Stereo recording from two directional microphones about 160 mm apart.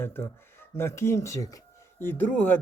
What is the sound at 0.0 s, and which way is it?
Speech, 15° left (ahead or behind).